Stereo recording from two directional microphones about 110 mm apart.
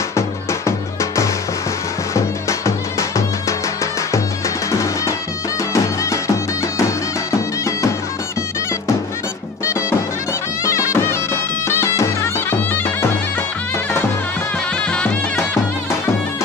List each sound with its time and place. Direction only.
0.1 s music: 25° left (ahead or behind)
9.7 s music: 25° left (ahead or behind)
11.6 s bagpipes: 25° left (ahead or behind)
14.8 s music: 10° left (ahead or behind)